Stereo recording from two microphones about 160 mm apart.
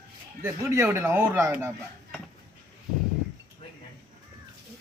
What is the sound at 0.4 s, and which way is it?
Speech, 15° right (ahead or behind).